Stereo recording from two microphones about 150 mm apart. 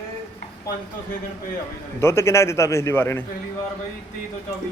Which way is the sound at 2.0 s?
15° left (ahead or behind).